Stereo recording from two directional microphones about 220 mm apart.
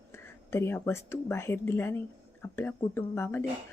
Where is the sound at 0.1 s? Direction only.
10° left (ahead or behind).